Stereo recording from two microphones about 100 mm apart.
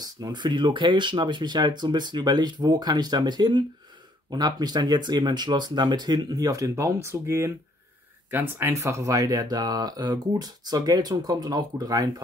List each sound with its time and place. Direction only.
0.0 s speech: 45° right (ahead or behind)